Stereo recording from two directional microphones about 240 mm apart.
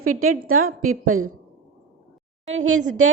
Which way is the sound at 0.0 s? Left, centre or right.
Right.